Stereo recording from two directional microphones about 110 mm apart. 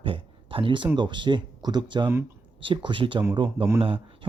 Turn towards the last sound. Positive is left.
turn(degrees=-50)  # may be behind; listen again after turning